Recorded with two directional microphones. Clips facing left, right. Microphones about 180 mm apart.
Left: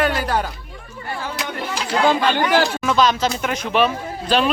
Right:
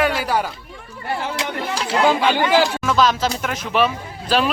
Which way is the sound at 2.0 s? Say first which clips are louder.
Even; 10° right (ahead or behind).